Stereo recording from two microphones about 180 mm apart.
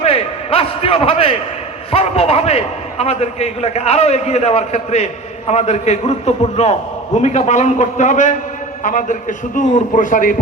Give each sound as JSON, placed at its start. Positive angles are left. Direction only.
{"t": 0.0, "sound": "a man's voice", "side_deg": 30}